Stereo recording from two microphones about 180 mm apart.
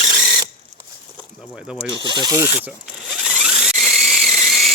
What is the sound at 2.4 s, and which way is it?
Drill, 10° right (ahead or behind).